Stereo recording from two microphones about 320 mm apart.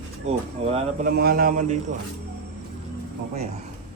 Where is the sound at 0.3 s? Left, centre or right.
Centre.